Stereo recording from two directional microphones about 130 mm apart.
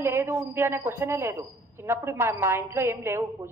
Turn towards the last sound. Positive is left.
turn(degrees=-20)  # may be behind; listen again after turning